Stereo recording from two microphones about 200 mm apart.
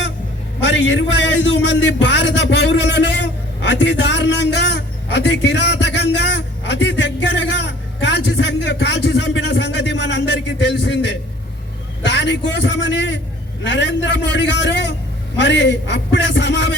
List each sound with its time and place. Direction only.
0.6 s a man's voice: 60° left (ahead or behind)
3.6 s a sound: 60° left (ahead or behind)
12.0 s a man's voice: 60° left (ahead or behind)